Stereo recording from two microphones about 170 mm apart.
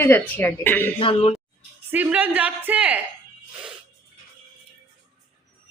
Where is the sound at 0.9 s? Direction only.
35° left (ahead or behind).